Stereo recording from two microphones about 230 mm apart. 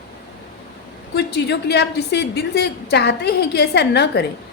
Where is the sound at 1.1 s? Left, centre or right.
Left.